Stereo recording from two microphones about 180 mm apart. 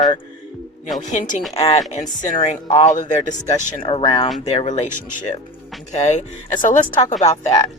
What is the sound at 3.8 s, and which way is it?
Speech, 30° left (ahead or behind).